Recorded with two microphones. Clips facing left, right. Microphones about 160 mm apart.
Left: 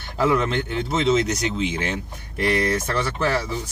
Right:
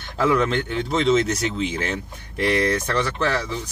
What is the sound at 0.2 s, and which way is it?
Speech, centre (ahead or behind).